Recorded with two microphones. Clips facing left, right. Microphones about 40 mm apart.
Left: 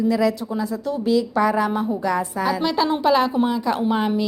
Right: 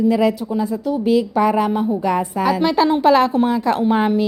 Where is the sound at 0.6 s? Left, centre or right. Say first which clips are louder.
Right 5 dB; centre.